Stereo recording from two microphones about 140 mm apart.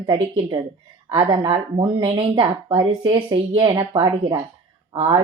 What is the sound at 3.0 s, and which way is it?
Speech, 30° right (ahead or behind).